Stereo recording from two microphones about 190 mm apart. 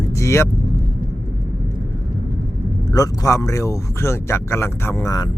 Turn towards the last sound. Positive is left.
turn(degrees=15)  # may be behind; listen again after turning